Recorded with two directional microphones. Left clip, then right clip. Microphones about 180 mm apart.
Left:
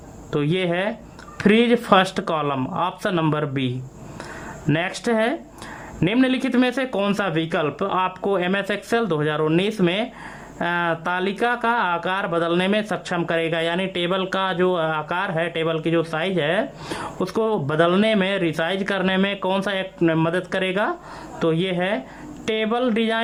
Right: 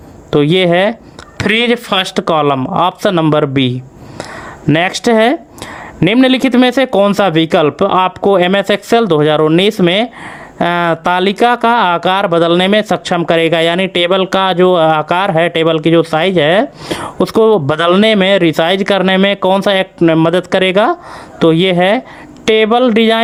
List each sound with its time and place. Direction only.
0.3 s speech: 35° right (ahead or behind)
4.7 s speech: 35° right (ahead or behind)